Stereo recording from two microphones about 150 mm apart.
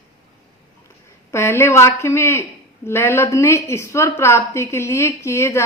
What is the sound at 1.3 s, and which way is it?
A woman's voice, 20° left (ahead or behind).